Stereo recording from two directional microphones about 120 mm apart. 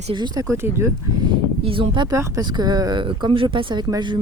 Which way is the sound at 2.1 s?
30° right (ahead or behind).